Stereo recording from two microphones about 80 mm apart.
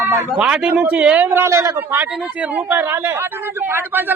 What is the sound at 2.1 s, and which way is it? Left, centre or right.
Speech, centre.